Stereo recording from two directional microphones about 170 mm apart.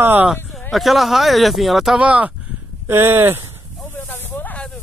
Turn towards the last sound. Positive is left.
turn(degrees=5)  # may be behind; listen again after turning